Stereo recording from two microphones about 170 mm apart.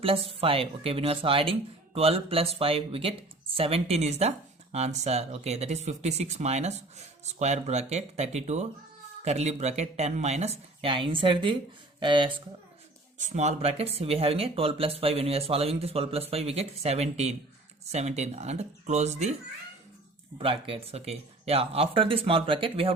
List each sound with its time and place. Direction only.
0.0 s speech: 35° right (ahead or behind)
13.1 s speech: 45° right (ahead or behind)
20.4 s speech: 35° right (ahead or behind)